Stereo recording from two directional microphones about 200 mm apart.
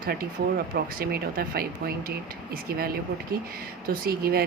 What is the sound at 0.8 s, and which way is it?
Speech, 50° right (ahead or behind).